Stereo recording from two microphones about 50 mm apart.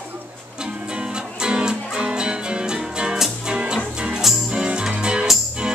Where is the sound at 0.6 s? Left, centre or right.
Centre.